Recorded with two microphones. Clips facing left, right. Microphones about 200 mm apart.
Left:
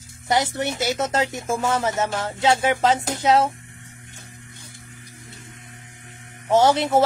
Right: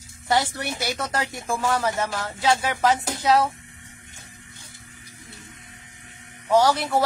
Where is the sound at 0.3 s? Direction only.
20° left (ahead or behind).